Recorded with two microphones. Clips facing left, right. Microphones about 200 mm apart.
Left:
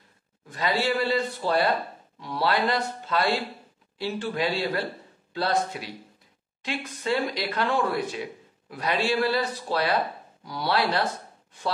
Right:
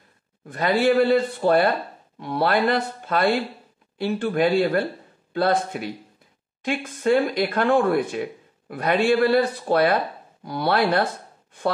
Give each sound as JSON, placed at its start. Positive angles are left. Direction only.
{"t": 0.5, "sound": "speech", "side_deg": -55}